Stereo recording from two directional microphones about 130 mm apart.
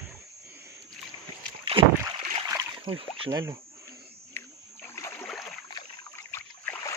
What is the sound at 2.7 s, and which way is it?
Rowboat, 45° right (ahead or behind).